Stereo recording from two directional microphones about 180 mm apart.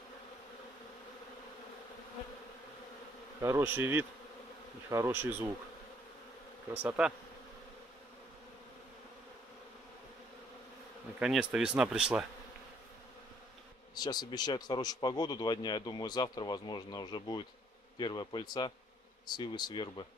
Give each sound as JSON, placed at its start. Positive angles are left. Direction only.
{"t": 3.4, "sound": "bee", "side_deg": -10}
{"t": 6.7, "sound": "bee", "side_deg": -10}
{"t": 11.1, "sound": "speech", "side_deg": -5}
{"t": 13.9, "sound": "speech", "side_deg": 25}